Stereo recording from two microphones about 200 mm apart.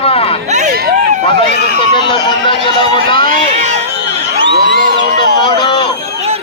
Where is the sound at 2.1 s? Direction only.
25° left (ahead or behind).